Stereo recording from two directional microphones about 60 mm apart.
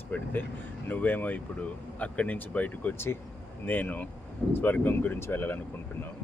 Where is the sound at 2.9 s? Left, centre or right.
Left.